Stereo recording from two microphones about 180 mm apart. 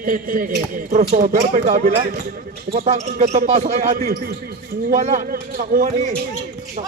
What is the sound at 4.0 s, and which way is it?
A man's voice, 55° right (ahead or behind).